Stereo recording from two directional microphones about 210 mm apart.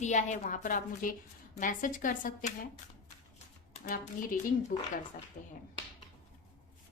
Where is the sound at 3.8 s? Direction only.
40° left (ahead or behind).